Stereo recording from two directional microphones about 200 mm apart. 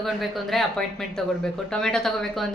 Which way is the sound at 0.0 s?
Centre (ahead or behind).